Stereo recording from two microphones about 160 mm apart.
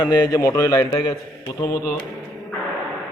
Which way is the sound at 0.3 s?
20° left (ahead or behind).